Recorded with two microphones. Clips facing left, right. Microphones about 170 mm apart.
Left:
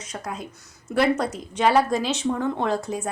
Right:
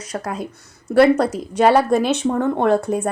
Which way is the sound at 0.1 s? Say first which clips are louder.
Right 7 dB; 70° right (ahead or behind).